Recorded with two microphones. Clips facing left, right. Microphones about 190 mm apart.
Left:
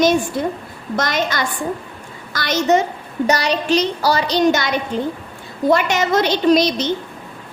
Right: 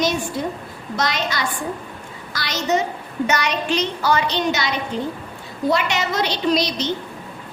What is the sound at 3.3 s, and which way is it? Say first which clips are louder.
A woman's voice: left 5 dB; 35° left (ahead or behind).